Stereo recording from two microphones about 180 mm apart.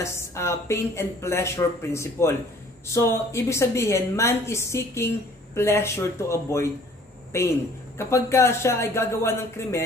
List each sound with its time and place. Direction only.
0.0 s a woman's voice: 15° left (ahead or behind)